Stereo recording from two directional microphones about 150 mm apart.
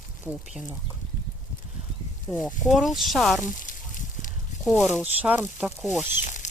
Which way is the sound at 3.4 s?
60° left (ahead or behind).